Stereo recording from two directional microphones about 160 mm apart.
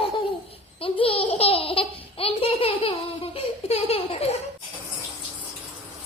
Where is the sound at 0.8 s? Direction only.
35° left (ahead or behind).